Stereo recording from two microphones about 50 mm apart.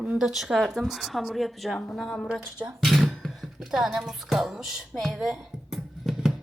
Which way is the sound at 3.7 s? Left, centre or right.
Centre.